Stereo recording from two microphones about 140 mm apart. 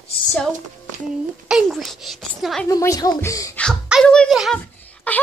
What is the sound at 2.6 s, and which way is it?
Speech, 25° left (ahead or behind).